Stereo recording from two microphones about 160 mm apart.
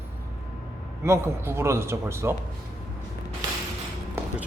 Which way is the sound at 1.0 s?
15° right (ahead or behind).